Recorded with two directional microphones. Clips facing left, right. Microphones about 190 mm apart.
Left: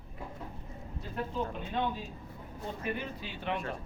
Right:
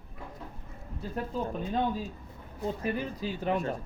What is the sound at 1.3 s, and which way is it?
Speech, 35° right (ahead or behind).